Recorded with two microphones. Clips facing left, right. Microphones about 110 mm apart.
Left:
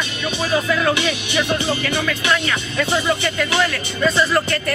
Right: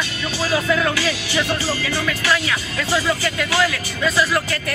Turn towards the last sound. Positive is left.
turn(degrees=0)  # may be behind; listen again after turning